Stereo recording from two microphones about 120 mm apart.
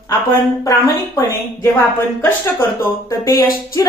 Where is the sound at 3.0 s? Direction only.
25° left (ahead or behind).